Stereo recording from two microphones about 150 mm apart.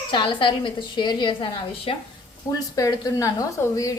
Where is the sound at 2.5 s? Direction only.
25° left (ahead or behind).